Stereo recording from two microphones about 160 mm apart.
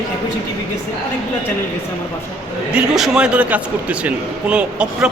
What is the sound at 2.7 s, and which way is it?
A man's voice, 5° right (ahead or behind).